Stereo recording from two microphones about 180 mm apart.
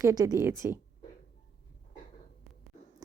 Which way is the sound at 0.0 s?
20° right (ahead or behind).